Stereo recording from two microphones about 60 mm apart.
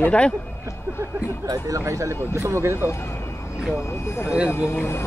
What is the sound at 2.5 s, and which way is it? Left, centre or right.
Speech, right.